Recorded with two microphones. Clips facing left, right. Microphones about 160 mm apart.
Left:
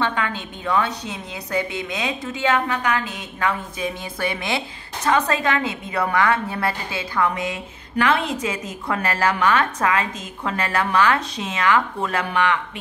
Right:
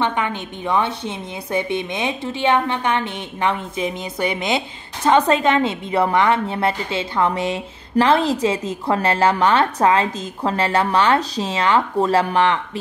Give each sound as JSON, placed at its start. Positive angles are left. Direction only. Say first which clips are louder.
{"t": 0.0, "sound": "a woman's voice", "louder": "right 2 dB", "side_deg": -20}